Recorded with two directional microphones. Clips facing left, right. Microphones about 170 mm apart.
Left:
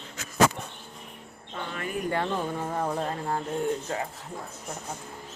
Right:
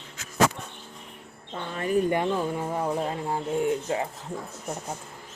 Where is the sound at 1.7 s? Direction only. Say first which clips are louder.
Right 9 dB; 35° right (ahead or behind).